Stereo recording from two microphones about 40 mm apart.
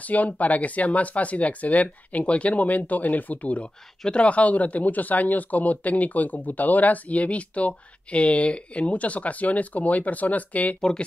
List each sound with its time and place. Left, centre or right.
0.0 s speech: left
10.8 s speech: centre